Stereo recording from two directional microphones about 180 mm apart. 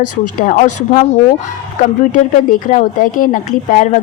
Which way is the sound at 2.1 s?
50° left (ahead or behind).